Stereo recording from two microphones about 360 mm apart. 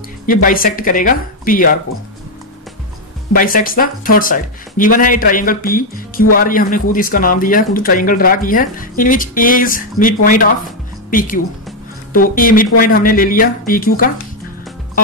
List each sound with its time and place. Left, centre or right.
0.3 s speech: left
3.3 s speech: left